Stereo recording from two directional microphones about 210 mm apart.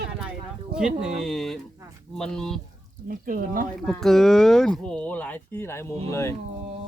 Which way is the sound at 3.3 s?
40° right (ahead or behind).